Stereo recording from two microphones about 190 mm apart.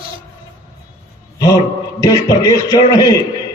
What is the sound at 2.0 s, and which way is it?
A man's voice, 20° left (ahead or behind).